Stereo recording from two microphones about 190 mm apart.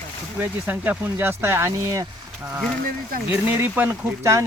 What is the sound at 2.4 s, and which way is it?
Speech, 5° right (ahead or behind).